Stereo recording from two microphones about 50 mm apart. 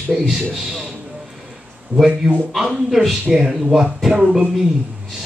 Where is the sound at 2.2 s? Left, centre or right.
Centre.